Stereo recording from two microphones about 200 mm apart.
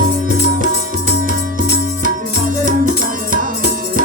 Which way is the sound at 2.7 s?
45° right (ahead or behind).